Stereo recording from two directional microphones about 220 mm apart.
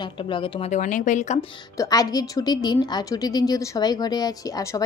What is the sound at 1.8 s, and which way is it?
A woman's voice, 15° left (ahead or behind).